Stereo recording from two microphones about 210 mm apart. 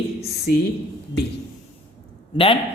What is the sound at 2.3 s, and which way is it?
Speech, 25° left (ahead or behind).